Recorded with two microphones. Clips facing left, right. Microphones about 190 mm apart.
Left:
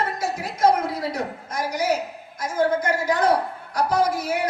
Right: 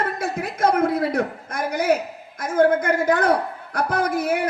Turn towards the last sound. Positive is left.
turn(degrees=-55)  # may be behind; listen again after turning